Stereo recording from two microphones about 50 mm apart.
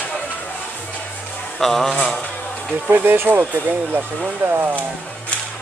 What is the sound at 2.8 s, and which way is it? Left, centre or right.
Speech, right.